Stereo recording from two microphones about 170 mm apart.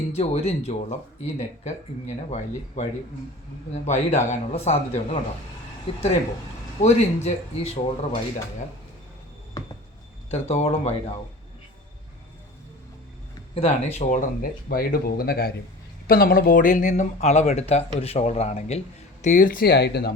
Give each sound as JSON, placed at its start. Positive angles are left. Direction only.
{"t": 0.2, "sound": "speech", "side_deg": 40}
{"t": 3.8, "sound": "speech", "side_deg": 40}
{"t": 9.6, "sound": "a sound", "side_deg": 20}
{"t": 10.3, "sound": "speech", "side_deg": 40}
{"t": 13.5, "sound": "speech", "side_deg": 35}
{"t": 19.2, "sound": "speech", "side_deg": 50}